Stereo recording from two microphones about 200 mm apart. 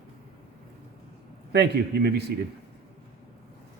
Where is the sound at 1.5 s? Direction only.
55° right (ahead or behind).